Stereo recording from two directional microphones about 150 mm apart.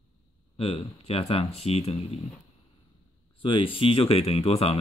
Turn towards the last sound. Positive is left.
turn(degrees=40)  # may be behind; listen again after turning